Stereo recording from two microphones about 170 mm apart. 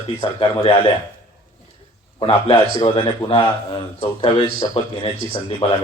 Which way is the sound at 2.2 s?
35° left (ahead or behind).